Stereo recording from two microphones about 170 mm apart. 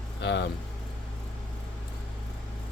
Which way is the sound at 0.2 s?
90° left.